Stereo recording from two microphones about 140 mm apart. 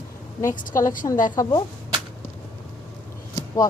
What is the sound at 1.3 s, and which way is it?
Speech, 25° left (ahead or behind).